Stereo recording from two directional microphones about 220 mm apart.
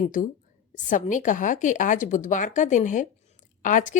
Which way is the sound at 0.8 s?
35° left (ahead or behind).